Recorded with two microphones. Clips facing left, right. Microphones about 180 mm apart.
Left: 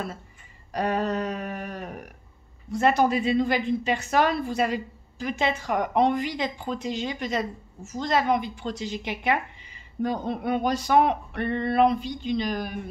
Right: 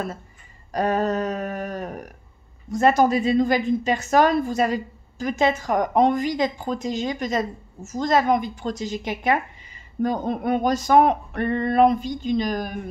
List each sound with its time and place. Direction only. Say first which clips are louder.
0.7 s a woman's voice: right 4 dB; 45° right (ahead or behind)